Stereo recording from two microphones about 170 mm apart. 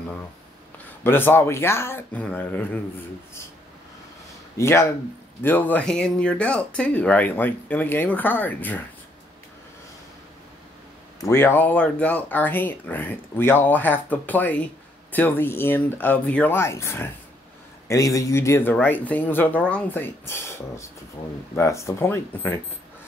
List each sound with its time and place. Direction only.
1.0 s speech: 10° left (ahead or behind)
4.6 s speech: 15° left (ahead or behind)
11.1 s speech: 15° left (ahead or behind)